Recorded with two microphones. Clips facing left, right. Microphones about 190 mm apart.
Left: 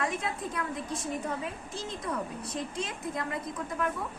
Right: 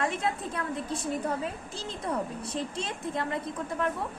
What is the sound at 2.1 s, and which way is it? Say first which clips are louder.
A woman's voice: right 4 dB; 30° right (ahead or behind).